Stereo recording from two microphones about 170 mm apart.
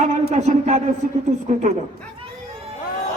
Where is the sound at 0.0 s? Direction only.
40° right (ahead or behind).